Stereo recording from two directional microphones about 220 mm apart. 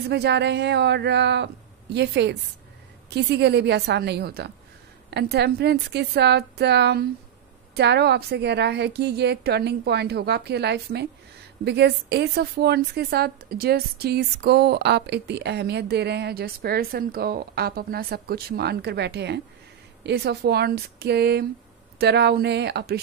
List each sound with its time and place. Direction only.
0.1 s a woman's voice: 50° right (ahead or behind)